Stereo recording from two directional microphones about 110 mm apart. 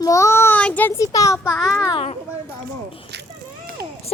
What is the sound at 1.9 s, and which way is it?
Speech, 70° left (ahead or behind).